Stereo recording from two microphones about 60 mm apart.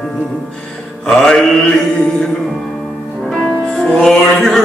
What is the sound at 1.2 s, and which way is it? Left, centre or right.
Mantra, centre.